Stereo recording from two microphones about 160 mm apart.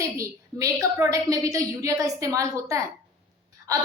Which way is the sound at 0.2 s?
20° right (ahead or behind).